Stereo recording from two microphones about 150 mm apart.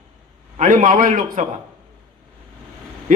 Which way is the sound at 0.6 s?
65° right (ahead or behind).